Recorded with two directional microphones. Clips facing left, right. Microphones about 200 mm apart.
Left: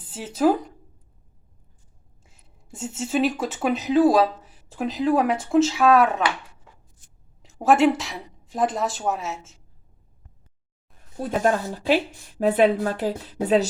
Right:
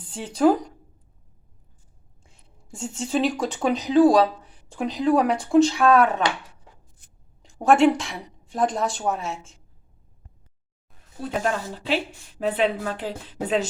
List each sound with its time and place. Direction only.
0.0 s speech: 5° left (ahead or behind)
2.2 s speech: 5° left (ahead or behind)
7.4 s a woman's voice: centre (ahead or behind)
11.4 s a woman's voice: 45° left (ahead or behind)